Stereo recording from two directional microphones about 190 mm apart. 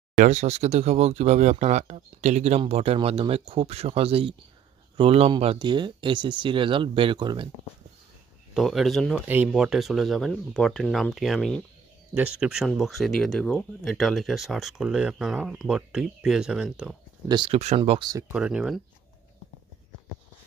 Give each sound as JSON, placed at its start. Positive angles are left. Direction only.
{"t": 0.1, "sound": "speech", "side_deg": -40}
{"t": 8.5, "sound": "speech", "side_deg": 0}
{"t": 17.3, "sound": "speech", "side_deg": -30}
{"t": 18.3, "sound": "speech", "side_deg": -5}